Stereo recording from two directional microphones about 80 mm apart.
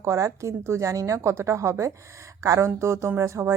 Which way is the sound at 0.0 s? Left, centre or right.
Right.